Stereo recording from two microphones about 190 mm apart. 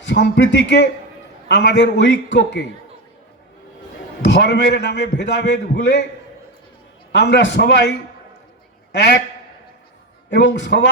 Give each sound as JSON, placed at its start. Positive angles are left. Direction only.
{"t": 0.1, "sound": "a man's voice", "side_deg": 70}
{"t": 4.4, "sound": "a man's voice", "side_deg": 65}
{"t": 7.1, "sound": "a man's voice", "side_deg": 65}
{"t": 9.0, "sound": "a man's voice", "side_deg": 60}
{"t": 10.2, "sound": "a man's voice", "side_deg": 70}